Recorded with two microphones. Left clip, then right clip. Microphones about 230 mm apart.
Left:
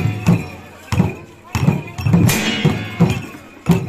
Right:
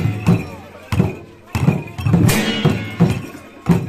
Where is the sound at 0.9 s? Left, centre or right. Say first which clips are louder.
Even; centre.